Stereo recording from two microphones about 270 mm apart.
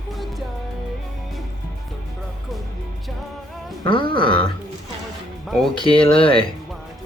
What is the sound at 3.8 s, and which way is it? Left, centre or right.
Speech, centre.